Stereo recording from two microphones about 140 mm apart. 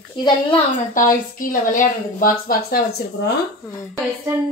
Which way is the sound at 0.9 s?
75° left (ahead or behind).